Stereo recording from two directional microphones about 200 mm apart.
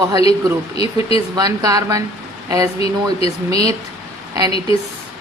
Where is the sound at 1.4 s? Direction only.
20° right (ahead or behind).